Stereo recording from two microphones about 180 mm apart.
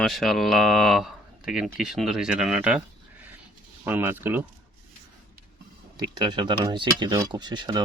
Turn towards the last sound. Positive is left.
turn(degrees=-25)  # may be behind; listen again after turning